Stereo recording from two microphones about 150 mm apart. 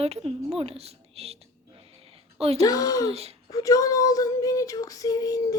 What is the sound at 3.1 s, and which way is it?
Speech, 45° right (ahead or behind).